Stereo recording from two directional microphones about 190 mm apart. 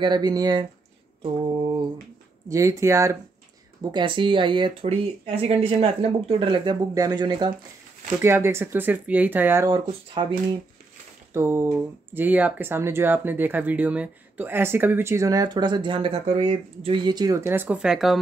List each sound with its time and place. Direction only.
0.0 s speech: 20° right (ahead or behind)
2.5 s speech: 15° right (ahead or behind)
9.8 s speech: 25° right (ahead or behind)
11.3 s speech: 10° right (ahead or behind)